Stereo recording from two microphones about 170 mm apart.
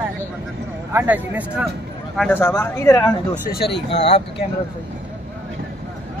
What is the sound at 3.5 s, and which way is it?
Speech, 80° left.